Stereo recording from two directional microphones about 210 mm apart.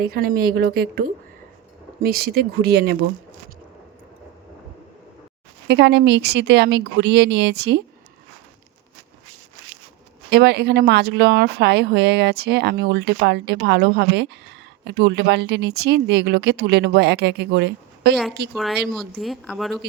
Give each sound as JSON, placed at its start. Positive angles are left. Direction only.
{"t": 0.0, "sound": "speech", "side_deg": -45}
{"t": 5.6, "sound": "speech", "side_deg": -55}
{"t": 10.2, "sound": "speech", "side_deg": -50}
{"t": 18.5, "sound": "a woman's voice", "side_deg": 0}